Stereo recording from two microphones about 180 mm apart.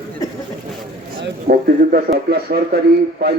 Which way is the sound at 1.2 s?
60° right (ahead or behind).